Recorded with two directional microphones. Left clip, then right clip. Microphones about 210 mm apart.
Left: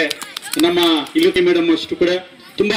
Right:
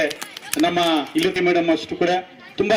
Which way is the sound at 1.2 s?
55° right (ahead or behind).